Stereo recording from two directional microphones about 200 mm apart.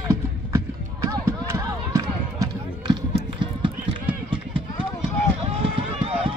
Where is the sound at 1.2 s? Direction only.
15° right (ahead or behind).